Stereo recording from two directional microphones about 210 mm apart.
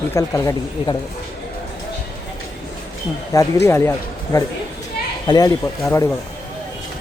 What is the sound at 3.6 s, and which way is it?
Speech, 10° left (ahead or behind).